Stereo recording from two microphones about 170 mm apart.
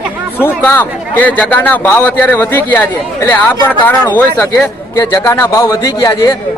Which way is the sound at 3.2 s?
20° left (ahead or behind).